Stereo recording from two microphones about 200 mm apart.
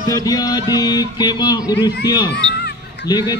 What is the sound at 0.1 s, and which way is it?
Speech, 20° left (ahead or behind).